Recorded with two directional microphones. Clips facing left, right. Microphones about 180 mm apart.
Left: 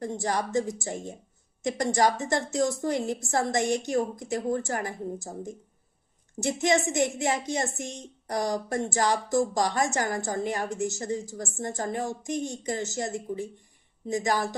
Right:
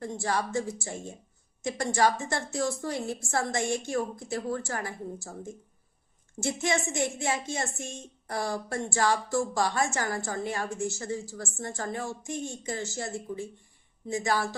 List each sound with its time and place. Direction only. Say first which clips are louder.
0.0 s a woman's voice: left 1 dB; 20° left (ahead or behind)